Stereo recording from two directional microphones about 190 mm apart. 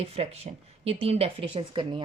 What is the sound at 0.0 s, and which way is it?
Speech, 35° right (ahead or behind).